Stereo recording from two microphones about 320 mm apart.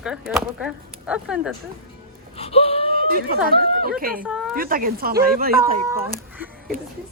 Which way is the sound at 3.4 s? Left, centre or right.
Right.